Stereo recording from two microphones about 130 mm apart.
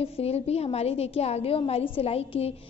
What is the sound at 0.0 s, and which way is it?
A woman's voice, 50° left (ahead or behind).